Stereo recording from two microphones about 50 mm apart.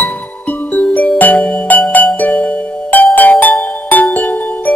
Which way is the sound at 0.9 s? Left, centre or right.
Left.